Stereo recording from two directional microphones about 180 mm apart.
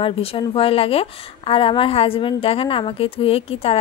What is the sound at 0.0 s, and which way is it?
Speech, 30° left (ahead or behind).